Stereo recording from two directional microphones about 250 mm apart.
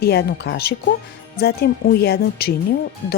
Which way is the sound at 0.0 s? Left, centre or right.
Left.